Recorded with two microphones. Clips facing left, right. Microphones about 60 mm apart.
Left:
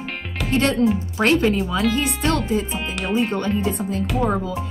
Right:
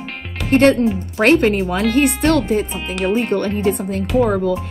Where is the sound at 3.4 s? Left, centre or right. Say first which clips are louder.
Right 4 dB; right.